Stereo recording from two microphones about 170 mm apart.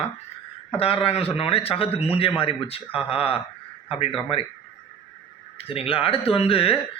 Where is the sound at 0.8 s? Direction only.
35° left (ahead or behind).